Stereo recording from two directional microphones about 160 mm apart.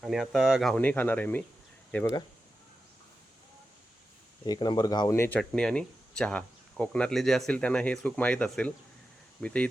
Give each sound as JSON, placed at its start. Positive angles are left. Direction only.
{"t": 0.0, "sound": "speech", "side_deg": 0}
{"t": 4.4, "sound": "speech", "side_deg": 25}
{"t": 5.4, "sound": "speech", "side_deg": 5}